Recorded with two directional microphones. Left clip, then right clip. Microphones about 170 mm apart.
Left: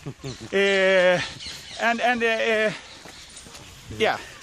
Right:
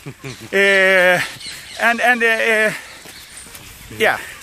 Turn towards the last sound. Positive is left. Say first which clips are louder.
# right 6 dB
turn(degrees=-10)  # may be behind; listen again after turning